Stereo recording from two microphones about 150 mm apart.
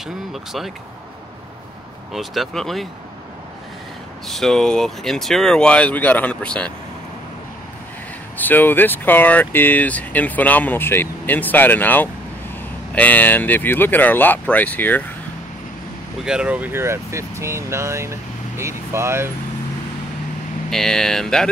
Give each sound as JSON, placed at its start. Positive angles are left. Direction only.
{"t": 0.0, "sound": "speech", "side_deg": 0}
{"t": 2.1, "sound": "speech", "side_deg": 0}
{"t": 4.3, "sound": "speech", "side_deg": 0}
{"t": 8.4, "sound": "speech", "side_deg": 10}
{"t": 16.3, "sound": "speech", "side_deg": -10}
{"t": 20.7, "sound": "speech", "side_deg": 5}